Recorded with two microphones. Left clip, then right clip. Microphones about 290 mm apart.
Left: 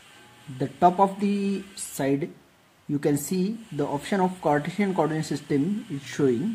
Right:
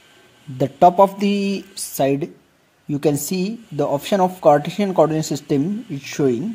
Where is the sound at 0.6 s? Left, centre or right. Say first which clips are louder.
Right 8 dB; right.